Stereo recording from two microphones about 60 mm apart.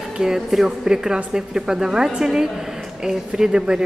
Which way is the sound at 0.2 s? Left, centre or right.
Centre.